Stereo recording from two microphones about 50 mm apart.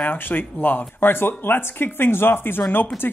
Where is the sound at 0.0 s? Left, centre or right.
Left.